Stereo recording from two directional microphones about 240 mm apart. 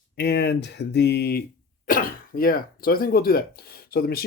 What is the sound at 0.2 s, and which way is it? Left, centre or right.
Speech, left.